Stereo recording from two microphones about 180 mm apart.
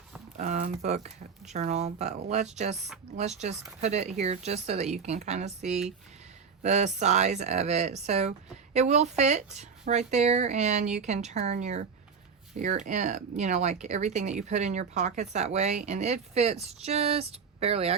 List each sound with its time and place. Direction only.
0.3 s speech: 45° right (ahead or behind)